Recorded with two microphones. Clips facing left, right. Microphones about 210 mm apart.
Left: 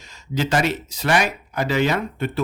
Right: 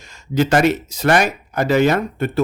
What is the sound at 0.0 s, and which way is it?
Speech, 50° right (ahead or behind).